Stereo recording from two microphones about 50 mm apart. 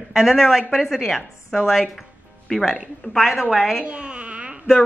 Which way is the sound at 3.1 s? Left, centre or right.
Centre.